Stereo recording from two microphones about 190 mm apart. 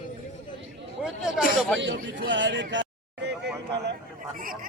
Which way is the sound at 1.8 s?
70° right (ahead or behind).